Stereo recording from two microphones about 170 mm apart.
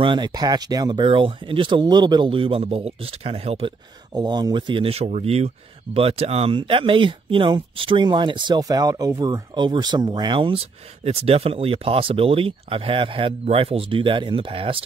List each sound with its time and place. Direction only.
0.0 s speech: 25° right (ahead or behind)
4.1 s speech: 25° right (ahead or behind)